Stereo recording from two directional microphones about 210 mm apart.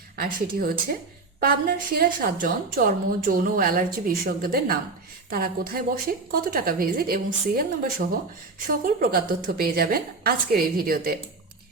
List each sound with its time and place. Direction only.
0.2 s a woman's voice: 45° right (ahead or behind)